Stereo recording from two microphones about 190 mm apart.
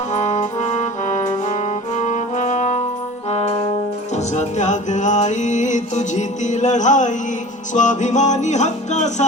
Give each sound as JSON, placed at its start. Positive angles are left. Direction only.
{"t": 0.1, "sound": "brass instrument", "side_deg": 40}
{"t": 4.1, "sound": "music", "side_deg": 35}